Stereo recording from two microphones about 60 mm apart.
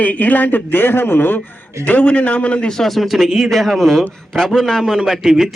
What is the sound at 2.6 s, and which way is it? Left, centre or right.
A man's voice, centre.